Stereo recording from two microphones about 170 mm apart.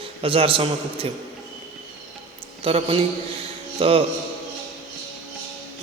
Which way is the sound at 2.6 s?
35° right (ahead or behind).